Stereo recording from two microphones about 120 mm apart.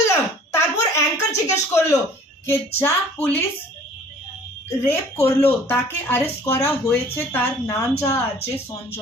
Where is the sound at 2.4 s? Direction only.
20° left (ahead or behind).